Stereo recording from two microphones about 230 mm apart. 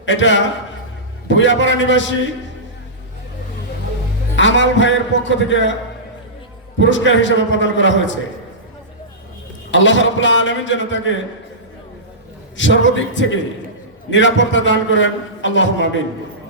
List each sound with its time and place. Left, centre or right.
0.0 s a man's voice: left
4.4 s a man's voice: left
6.7 s a man's voice: left
9.7 s a man's voice: left
12.5 s a man's voice: left